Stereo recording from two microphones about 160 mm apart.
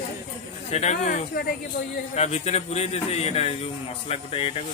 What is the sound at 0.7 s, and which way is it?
Speech, 45° left (ahead or behind).